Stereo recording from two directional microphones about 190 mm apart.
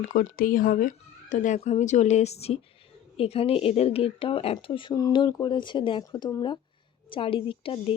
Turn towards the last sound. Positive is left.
turn(degrees=30)  # may be behind; listen again after turning